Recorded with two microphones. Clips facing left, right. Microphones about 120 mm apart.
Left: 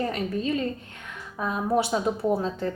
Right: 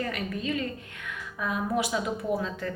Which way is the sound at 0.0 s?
35° left (ahead or behind).